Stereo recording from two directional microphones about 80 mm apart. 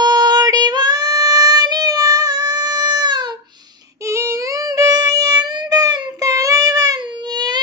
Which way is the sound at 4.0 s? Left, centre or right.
Right.